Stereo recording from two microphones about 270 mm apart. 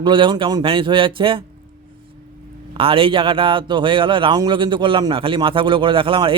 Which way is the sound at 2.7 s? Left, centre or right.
Centre.